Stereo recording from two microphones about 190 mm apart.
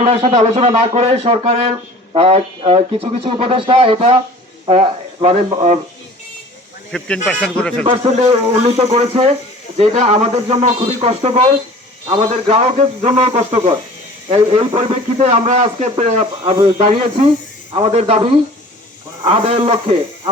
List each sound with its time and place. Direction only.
0.0 s a man's voice: 35° right (ahead or behind)
5.2 s a man's voice: 35° right (ahead or behind)
6.9 s speech: 5° left (ahead or behind)
8.3 s a man's voice: 30° right (ahead or behind)